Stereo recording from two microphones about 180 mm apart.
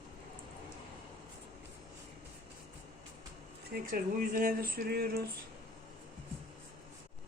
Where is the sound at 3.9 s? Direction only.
50° right (ahead or behind).